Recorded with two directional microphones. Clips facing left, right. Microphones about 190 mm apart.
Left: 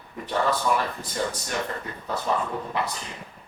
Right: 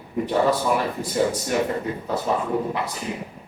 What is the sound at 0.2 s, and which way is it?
Speech, 15° right (ahead or behind).